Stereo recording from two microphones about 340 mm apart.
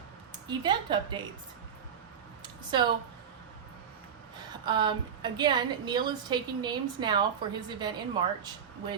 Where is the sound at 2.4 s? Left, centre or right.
Centre.